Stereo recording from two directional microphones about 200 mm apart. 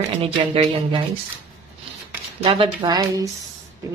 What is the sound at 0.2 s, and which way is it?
Speech, 30° right (ahead or behind).